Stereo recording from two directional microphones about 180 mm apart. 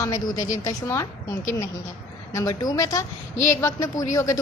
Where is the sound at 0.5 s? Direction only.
20° left (ahead or behind).